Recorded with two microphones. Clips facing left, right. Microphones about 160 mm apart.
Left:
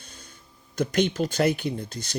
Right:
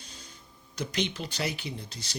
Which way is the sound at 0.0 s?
55° left (ahead or behind).